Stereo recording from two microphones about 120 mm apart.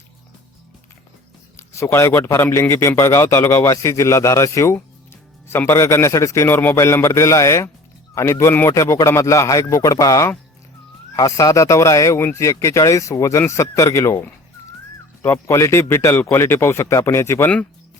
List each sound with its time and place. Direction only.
1.5 s a man's voice: 25° left (ahead or behind)